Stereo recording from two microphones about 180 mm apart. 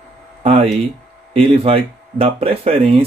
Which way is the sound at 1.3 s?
30° right (ahead or behind).